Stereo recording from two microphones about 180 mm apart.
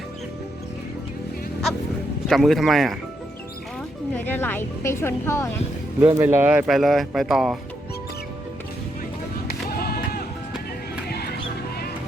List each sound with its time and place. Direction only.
2.2 s speech: centre (ahead or behind)
4.1 s a woman's voice: 10° left (ahead or behind)
6.0 s speech: 15° right (ahead or behind)
9.5 s music: 55° left (ahead or behind)